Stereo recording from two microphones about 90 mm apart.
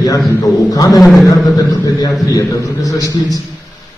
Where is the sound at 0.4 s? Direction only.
40° left (ahead or behind).